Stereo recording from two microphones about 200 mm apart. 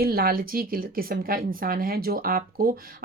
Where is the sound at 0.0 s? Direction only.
50° right (ahead or behind).